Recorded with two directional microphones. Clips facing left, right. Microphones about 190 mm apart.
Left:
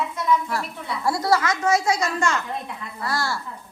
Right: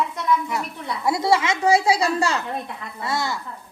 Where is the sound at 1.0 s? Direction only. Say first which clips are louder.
Right 1 dB; 25° right (ahead or behind).